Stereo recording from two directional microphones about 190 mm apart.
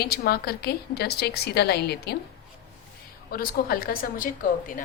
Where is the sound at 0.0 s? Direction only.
55° left (ahead or behind).